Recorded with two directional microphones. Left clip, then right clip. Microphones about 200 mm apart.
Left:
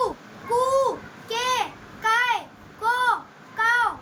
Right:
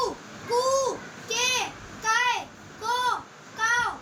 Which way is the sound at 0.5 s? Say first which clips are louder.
Left 3 dB; 20° left (ahead or behind).